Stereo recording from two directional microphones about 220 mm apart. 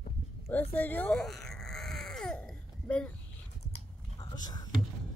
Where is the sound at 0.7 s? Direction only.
5° left (ahead or behind).